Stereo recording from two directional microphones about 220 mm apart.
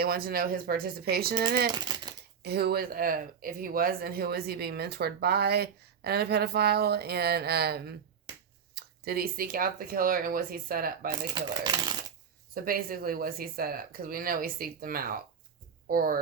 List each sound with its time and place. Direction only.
0.0 s speech: 45° right (ahead or behind)
1.7 s typewriter: 20° right (ahead or behind)
2.4 s speech: 45° right (ahead or behind)
11.1 s speech: 20° right (ahead or behind)
12.5 s speech: 40° right (ahead or behind)